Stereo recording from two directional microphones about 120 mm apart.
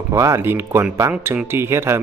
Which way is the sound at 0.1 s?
25° right (ahead or behind).